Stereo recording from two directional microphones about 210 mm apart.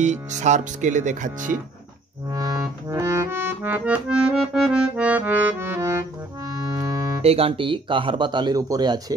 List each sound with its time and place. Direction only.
0.0 s speech: 35° right (ahead or behind)
2.3 s accordion: 15° right (ahead or behind)
7.2 s speech: 30° right (ahead or behind)